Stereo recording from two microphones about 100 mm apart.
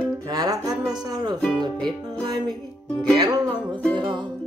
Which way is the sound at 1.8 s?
5° left (ahead or behind).